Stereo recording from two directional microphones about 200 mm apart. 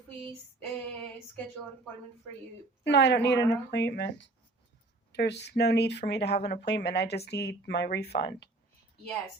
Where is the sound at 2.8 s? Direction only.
60° left (ahead or behind).